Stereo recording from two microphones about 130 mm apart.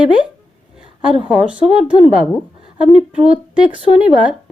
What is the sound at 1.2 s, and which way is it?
Speech, 5° right (ahead or behind).